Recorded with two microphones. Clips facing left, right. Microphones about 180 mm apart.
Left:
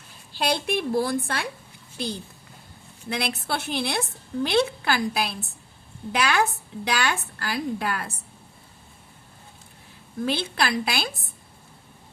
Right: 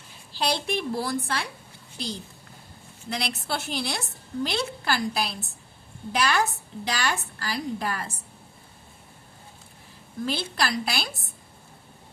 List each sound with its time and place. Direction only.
0.3 s a woman's voice: 55° left (ahead or behind)
3.1 s a woman's voice: 55° left (ahead or behind)
10.2 s a woman's voice: 60° left (ahead or behind)